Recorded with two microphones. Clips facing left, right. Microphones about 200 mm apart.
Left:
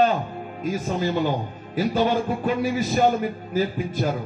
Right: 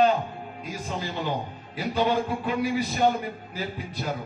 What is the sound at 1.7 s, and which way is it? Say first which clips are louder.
Speech: left 5 dB; 45° left (ahead or behind).